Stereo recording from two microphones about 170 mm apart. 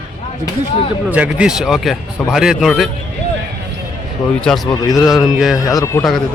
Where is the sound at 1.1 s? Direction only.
5° right (ahead or behind).